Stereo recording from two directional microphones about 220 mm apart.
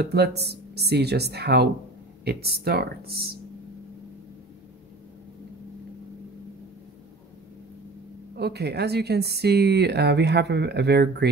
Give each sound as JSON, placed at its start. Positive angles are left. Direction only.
{"t": 0.0, "sound": "speech", "side_deg": -50}
{"t": 8.4, "sound": "speech", "side_deg": -50}